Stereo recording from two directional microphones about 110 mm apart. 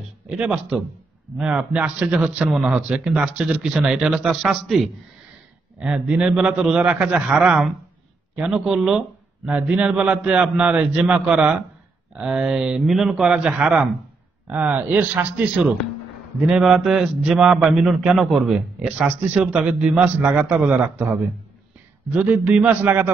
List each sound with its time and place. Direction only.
0.4 s a man's voice: 5° right (ahead or behind)